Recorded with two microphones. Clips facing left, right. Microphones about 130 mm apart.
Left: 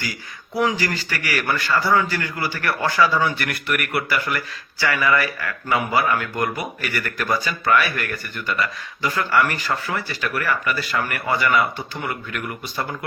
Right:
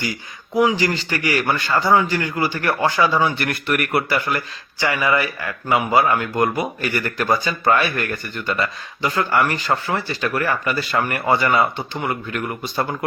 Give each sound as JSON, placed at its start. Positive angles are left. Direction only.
{"t": 0.5, "sound": "a man's voice", "side_deg": -15}